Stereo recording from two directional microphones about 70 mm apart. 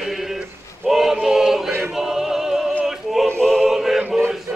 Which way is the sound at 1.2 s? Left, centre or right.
Centre.